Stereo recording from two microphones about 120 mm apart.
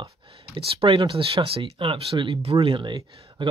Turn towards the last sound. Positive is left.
turn(degrees=-40)  # may be behind; listen again after turning